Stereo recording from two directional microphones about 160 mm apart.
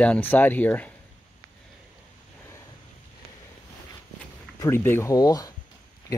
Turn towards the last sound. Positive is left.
turn(degrees=20)  # may be behind; listen again after turning